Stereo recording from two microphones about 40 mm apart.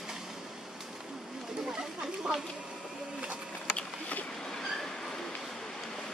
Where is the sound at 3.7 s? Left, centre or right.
Left.